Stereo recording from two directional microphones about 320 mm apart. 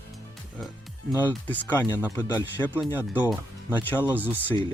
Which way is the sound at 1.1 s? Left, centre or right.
Centre.